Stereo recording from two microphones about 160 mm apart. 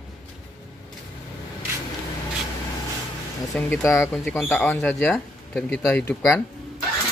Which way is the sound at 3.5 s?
5° left (ahead or behind).